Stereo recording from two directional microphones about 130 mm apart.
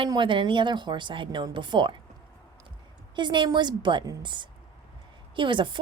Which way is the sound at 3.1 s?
35° right (ahead or behind).